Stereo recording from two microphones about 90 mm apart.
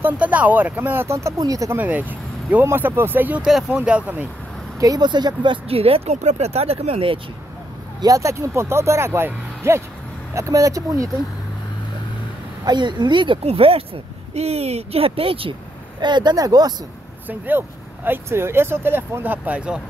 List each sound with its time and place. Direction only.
0.0 s speech: 15° right (ahead or behind); by 1.8 s 40° right (ahead or behind)
1.8 s speech: 20° right (ahead or behind)
3.4 s speech: 5° right (ahead or behind)
3.7 s speech: 15° right (ahead or behind)
4.7 s speech: 45° right (ahead or behind); by 7.2 s 90° right
8.0 s speech: 40° right (ahead or behind)
12.6 s speech: 55° right (ahead or behind); by 13.8 s 90° right
14.9 s speech: 90° right
16.0 s speech: 55° right (ahead or behind)
16.3 s speech: 45° right (ahead or behind)
17.3 s speech: 20° right (ahead or behind)